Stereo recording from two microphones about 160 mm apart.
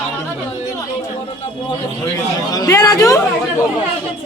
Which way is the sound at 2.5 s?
20° left (ahead or behind).